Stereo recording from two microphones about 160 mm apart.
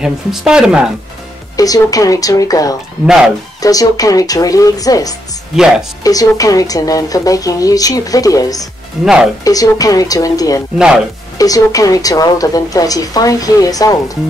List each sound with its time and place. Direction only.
0.0 s speech: 5° right (ahead or behind)
1.6 s a woman's voice: 20° left (ahead or behind)
5.6 s speech: 5° right (ahead or behind)
6.0 s a woman's voice: 20° left (ahead or behind)
9.0 s speech: 5° right (ahead or behind)
9.4 s a woman's voice: 20° left (ahead or behind)